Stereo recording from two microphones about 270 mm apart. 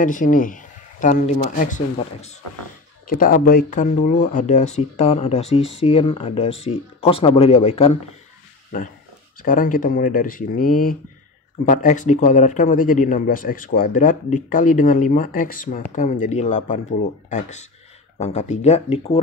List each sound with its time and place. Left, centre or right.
0.0 s speech: left
8.7 s speech: left